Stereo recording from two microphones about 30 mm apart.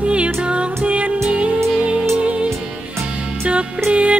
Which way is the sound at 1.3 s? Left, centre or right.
Right.